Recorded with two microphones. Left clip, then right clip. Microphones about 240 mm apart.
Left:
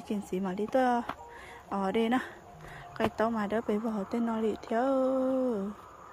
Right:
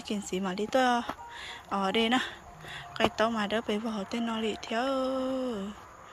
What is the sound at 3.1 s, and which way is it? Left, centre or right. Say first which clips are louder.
Speech: right 1 dB; left.